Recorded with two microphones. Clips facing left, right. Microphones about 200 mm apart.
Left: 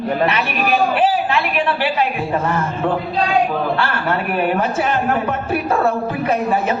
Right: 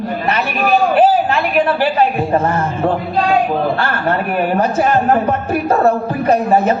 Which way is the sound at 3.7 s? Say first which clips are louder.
Right 2 dB; 40° right (ahead or behind).